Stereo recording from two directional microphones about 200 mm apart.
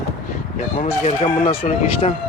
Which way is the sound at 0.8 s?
30° left (ahead or behind).